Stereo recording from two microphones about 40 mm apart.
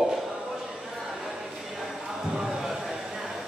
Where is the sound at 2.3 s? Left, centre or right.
Centre.